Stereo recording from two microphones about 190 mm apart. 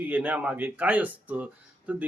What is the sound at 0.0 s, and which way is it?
Speech, 10° right (ahead or behind).